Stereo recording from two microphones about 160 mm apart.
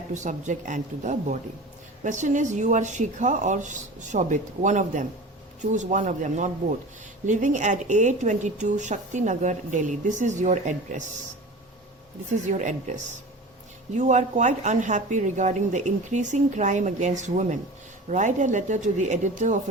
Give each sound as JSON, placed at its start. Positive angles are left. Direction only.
{"t": 0.1, "sound": "speech", "side_deg": -50}
{"t": 12.5, "sound": "speech", "side_deg": -50}